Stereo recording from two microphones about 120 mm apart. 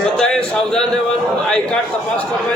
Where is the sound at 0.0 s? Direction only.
5° left (ahead or behind).